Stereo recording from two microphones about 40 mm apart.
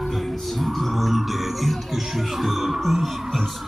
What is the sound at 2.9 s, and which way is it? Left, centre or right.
Speech, centre.